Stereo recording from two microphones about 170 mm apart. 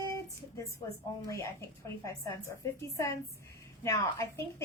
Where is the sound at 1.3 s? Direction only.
20° left (ahead or behind).